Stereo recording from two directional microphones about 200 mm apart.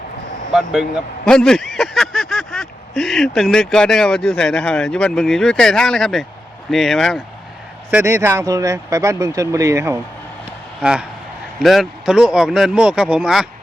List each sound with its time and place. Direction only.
0.5 s a man's voice: centre (ahead or behind)
7.9 s speech: 10° right (ahead or behind)
10.8 s a man's voice: 5° right (ahead or behind)